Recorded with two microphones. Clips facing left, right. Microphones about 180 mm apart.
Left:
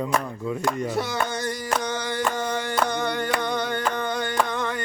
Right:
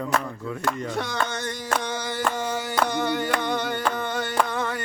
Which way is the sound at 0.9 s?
5° left (ahead or behind).